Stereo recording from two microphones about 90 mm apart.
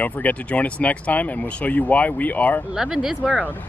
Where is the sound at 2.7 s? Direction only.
5° right (ahead or behind).